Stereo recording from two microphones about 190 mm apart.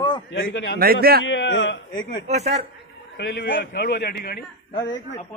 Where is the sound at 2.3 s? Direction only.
35° right (ahead or behind).